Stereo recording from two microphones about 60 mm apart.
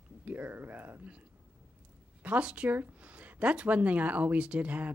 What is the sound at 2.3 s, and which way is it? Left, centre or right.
Speech, right.